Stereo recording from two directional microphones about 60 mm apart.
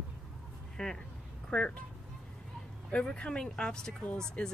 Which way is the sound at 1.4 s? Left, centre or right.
Centre.